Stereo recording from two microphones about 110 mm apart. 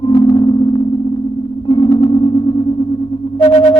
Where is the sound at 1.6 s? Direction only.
45° left (ahead or behind).